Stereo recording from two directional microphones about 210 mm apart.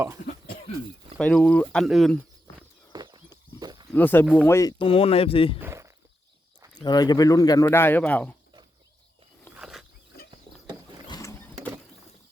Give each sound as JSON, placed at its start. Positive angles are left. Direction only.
{"t": 1.2, "sound": "speech", "side_deg": 5}
{"t": 2.9, "sound": "horse", "side_deg": -20}
{"t": 3.6, "sound": "a sound", "side_deg": -20}
{"t": 3.9, "sound": "speech", "side_deg": 10}
{"t": 4.8, "sound": "speech", "side_deg": 25}
{"t": 5.5, "sound": "a sound", "side_deg": -10}
{"t": 6.7, "sound": "speech", "side_deg": 20}
{"t": 9.6, "sound": "wild animals", "side_deg": -5}
{"t": 11.1, "sound": "mechanisms", "side_deg": 15}